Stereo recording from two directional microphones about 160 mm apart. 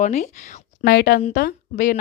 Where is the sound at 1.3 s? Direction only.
65° left (ahead or behind).